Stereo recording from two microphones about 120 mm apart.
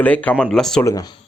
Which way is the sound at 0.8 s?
25° left (ahead or behind).